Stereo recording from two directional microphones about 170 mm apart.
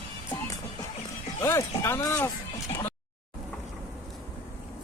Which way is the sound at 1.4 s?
15° left (ahead or behind).